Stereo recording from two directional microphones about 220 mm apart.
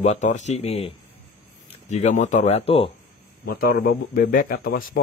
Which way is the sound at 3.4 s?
40° left (ahead or behind).